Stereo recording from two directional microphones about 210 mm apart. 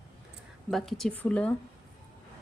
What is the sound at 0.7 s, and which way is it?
Speech, centre (ahead or behind).